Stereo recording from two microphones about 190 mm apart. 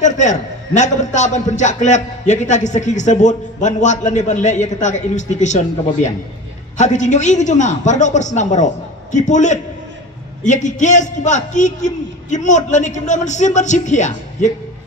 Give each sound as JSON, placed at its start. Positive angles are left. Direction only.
{"t": 0.0, "sound": "a man's voice", "side_deg": 40}
{"t": 6.8, "sound": "a man's voice", "side_deg": 40}